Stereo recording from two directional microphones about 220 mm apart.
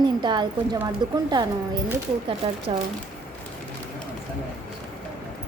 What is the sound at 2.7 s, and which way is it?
Speech, 25° right (ahead or behind).